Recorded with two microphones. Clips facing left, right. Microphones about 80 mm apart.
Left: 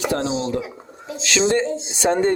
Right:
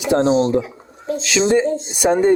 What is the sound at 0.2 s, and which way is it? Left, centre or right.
Speech, right.